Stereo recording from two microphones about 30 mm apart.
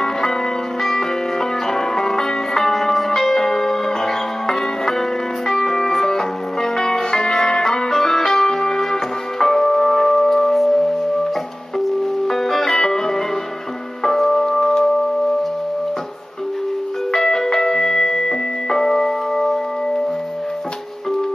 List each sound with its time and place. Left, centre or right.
0.0 s music: centre
12.3 s music: centre
14.0 s keyboard: centre
17.1 s music: centre